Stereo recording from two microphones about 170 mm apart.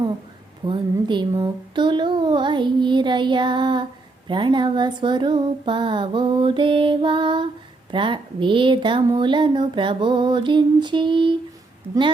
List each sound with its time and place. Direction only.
0.6 s speech: 25° right (ahead or behind)